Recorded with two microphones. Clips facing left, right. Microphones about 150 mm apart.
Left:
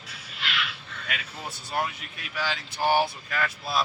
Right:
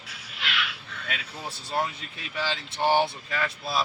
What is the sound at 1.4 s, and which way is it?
Speech, 30° right (ahead or behind).